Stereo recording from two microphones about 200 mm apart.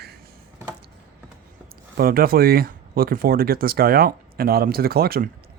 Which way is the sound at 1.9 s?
45° right (ahead or behind).